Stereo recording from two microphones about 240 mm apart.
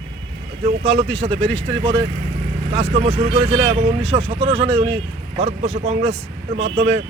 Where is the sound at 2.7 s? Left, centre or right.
Right.